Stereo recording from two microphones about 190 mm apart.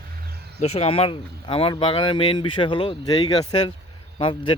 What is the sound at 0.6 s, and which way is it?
Speech, 30° left (ahead or behind).